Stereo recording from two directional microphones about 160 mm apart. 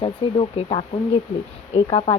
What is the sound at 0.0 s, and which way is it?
Speech, 35° left (ahead or behind).